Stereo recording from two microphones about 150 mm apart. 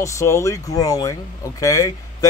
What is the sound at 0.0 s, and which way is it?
Speech, 20° left (ahead or behind).